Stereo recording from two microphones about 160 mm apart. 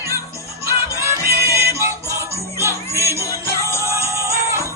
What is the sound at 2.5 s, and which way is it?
Music, 20° right (ahead or behind).